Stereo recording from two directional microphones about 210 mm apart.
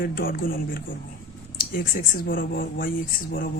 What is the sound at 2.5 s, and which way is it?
Speech, 45° left (ahead or behind).